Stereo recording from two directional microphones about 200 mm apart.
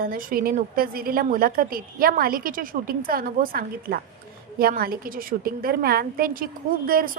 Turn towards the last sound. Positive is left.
turn(degrees=-50)  # may be behind; listen again after turning